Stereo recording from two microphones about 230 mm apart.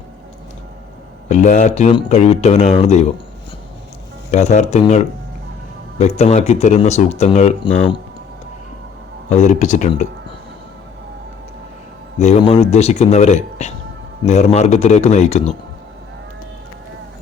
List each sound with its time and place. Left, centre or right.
1.3 s speech: left
4.3 s speech: left
9.3 s speech: left
12.2 s speech: left